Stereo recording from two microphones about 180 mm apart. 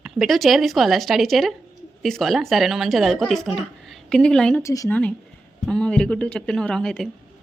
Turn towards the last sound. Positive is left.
turn(degrees=5)  # may be behind; listen again after turning